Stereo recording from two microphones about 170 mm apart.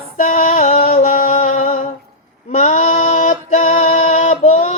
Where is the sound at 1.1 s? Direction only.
60° left (ahead or behind).